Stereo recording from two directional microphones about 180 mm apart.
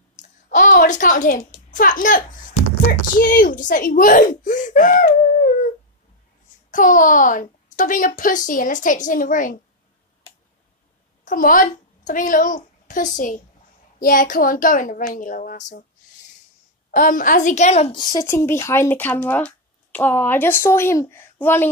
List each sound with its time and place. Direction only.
0.5 s a child's voice: 45° left (ahead or behind)
6.7 s a woman's voice: 50° left (ahead or behind)
11.2 s a woman's voice: 50° left (ahead or behind)
16.9 s a woman's voice: 45° left (ahead or behind); by 18.2 s 25° left (ahead or behind)
18.2 s speech: 15° left (ahead or behind)